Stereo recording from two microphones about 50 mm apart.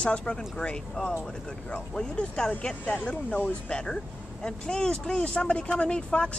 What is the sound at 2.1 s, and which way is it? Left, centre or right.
Speech, centre.